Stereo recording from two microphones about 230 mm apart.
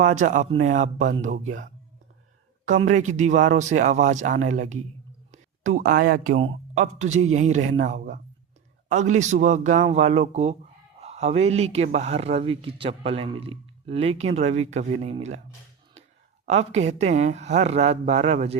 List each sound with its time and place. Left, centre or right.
0.0 s speech: right
2.8 s speech: right
16.5 s speech: right